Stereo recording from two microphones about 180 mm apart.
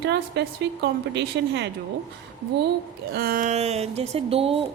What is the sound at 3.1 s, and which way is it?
Speech, 55° right (ahead or behind).